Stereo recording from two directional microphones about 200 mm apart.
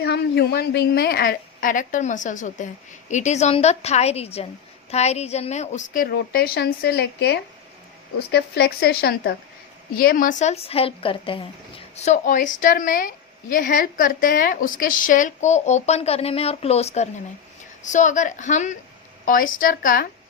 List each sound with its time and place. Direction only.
0.0 s a woman's voice: 55° left (ahead or behind); by 11.4 s 25° left (ahead or behind)
11.9 s a woman's voice: 35° left (ahead or behind)